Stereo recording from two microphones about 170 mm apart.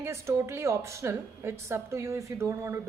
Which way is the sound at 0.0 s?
15° right (ahead or behind).